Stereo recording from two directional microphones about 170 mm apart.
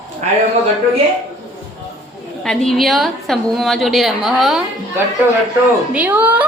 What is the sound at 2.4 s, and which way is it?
A woman's voice, 5° left (ahead or behind).